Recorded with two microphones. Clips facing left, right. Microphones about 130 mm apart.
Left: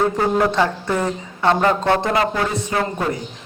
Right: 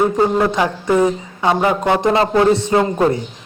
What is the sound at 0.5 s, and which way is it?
Speech, 10° right (ahead or behind).